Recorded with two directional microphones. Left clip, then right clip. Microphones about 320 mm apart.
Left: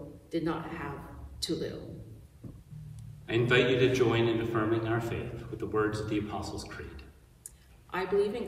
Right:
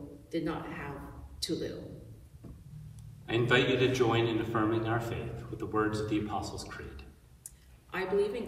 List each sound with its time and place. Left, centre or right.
0.3 s a man's voice: centre
3.3 s a man's voice: centre